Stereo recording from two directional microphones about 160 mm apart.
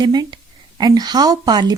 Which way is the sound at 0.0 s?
25° right (ahead or behind).